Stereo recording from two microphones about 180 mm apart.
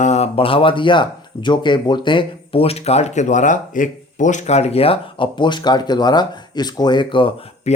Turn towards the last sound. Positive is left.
turn(degrees=30)  # may be behind; listen again after turning